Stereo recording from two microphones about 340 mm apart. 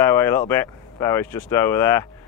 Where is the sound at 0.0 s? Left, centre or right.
Centre.